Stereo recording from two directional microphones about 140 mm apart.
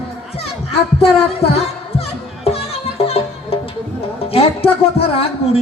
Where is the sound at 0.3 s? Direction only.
45° left (ahead or behind).